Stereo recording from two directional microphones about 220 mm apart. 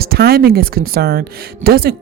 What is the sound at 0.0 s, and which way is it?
Speech, 45° right (ahead or behind).